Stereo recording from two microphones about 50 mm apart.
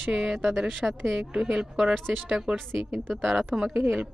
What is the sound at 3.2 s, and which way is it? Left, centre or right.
Speech, centre.